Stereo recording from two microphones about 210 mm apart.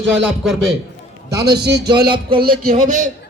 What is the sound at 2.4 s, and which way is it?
Speech, 45° right (ahead or behind).